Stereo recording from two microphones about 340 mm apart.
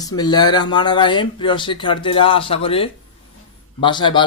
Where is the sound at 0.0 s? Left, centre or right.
Centre.